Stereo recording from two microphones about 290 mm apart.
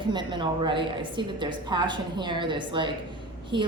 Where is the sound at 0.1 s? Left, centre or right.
Centre.